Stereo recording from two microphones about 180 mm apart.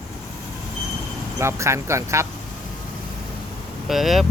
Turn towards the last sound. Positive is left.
turn(degrees=0)  # may be behind; listen again after turning